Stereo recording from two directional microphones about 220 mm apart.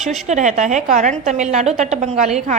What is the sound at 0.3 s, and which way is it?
A woman's voice, 35° right (ahead or behind).